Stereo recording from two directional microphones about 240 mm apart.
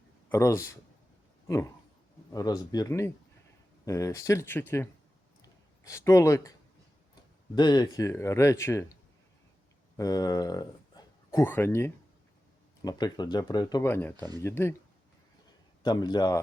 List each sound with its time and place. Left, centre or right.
0.3 s speech: centre
2.3 s speech: centre
7.5 s speech: centre
10.0 s speech: centre
15.8 s speech: centre